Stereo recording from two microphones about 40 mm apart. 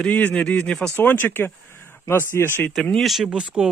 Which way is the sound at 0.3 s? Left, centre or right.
Left.